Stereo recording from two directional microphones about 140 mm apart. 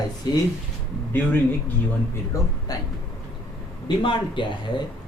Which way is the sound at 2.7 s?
25° left (ahead or behind).